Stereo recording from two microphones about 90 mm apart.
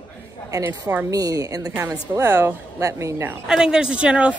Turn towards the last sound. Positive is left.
turn(degrees=-10)  # may be behind; listen again after turning